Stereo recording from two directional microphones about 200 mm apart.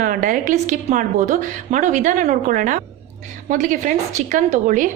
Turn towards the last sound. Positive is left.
turn(degrees=-40)  # may be behind; listen again after turning